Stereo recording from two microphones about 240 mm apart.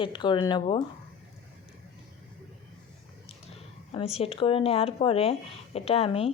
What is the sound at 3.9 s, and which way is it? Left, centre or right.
Speech, left.